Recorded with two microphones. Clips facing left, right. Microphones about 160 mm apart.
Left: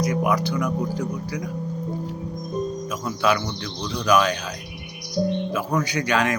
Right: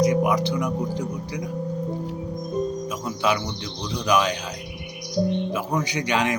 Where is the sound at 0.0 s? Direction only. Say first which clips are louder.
Right 2 dB; 20° right (ahead or behind).